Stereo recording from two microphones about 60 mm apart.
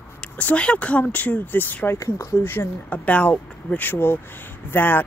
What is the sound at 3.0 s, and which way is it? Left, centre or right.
Speech, left.